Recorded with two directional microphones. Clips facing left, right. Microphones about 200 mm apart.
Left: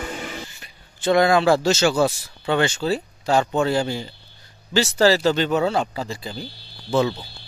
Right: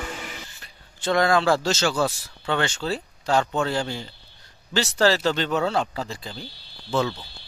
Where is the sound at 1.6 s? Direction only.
10° left (ahead or behind).